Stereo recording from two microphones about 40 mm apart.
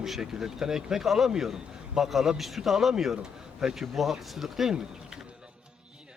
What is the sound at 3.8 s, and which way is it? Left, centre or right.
Speech, centre.